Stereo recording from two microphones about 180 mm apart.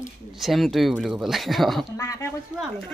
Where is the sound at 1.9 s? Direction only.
20° left (ahead or behind).